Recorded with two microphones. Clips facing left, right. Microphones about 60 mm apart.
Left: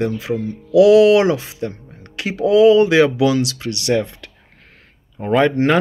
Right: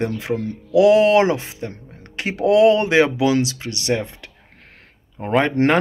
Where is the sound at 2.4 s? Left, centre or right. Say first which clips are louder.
Left 3 dB; right.